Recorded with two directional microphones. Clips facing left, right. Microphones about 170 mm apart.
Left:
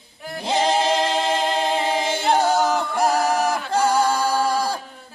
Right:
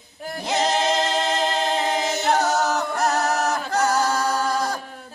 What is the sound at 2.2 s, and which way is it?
A capella, 30° left (ahead or behind).